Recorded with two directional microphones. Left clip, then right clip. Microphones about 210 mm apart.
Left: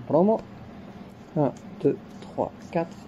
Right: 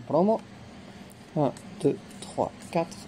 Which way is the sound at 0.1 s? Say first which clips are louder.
Left 2 dB; 35° right (ahead or behind).